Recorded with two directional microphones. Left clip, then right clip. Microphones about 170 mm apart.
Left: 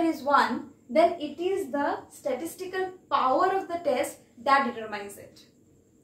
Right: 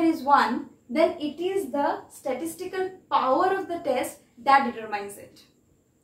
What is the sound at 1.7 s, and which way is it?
A woman's voice, 5° left (ahead or behind).